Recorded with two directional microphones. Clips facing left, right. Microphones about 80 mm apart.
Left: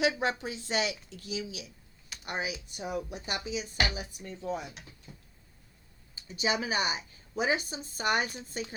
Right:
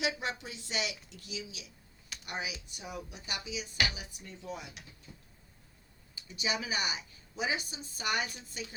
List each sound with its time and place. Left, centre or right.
0.0 s speech: left
5.1 s a sound: centre
6.1 s speech: left